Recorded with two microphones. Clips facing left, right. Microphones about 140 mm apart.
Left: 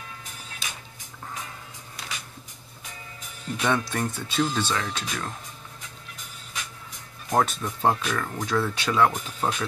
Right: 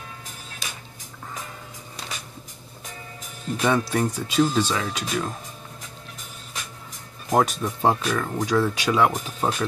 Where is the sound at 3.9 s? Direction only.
10° right (ahead or behind).